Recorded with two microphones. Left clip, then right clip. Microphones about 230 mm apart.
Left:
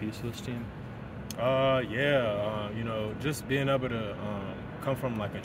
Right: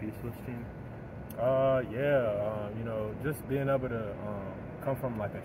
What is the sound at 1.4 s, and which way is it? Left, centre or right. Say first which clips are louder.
Speech: left 1 dB; left.